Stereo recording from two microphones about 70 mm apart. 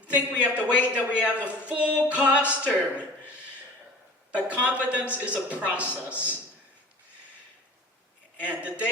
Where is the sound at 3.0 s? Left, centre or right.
Centre.